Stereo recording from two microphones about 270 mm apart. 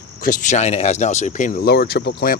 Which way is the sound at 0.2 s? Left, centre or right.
Left.